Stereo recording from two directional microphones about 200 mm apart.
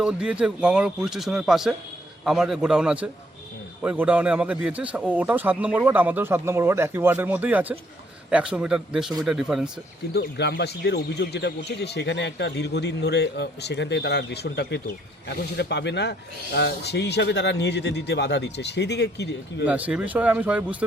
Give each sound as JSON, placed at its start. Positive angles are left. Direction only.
{"t": 0.0, "sound": "a man's voice", "side_deg": -5}
{"t": 10.2, "sound": "speech", "side_deg": 55}
{"t": 19.6, "sound": "a man's voice", "side_deg": -5}